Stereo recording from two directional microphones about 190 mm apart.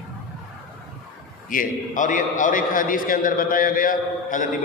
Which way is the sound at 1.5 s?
45° left (ahead or behind).